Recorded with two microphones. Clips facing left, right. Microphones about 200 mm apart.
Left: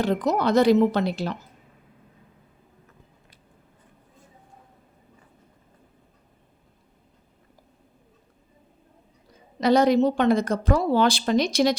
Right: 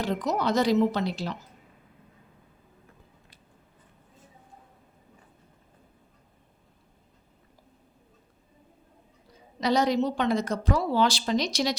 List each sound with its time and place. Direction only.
0.0 s speech: 60° left (ahead or behind)
9.6 s speech: 55° left (ahead or behind)